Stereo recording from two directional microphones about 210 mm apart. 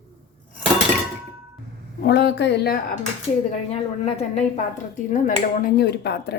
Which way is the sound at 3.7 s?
30° left (ahead or behind).